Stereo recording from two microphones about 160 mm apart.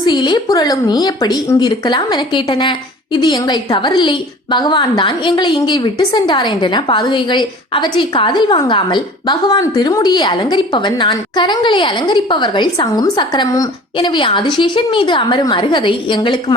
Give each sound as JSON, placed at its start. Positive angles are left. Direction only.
{"t": 0.0, "sound": "a woman's voice", "side_deg": 30}